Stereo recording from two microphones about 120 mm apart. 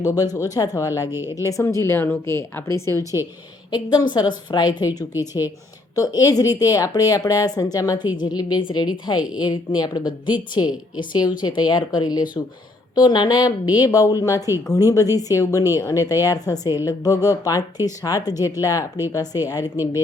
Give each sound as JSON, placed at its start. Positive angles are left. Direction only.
{"t": 0.0, "sound": "a woman's voice", "side_deg": 30}
{"t": 3.7, "sound": "a woman's voice", "side_deg": 35}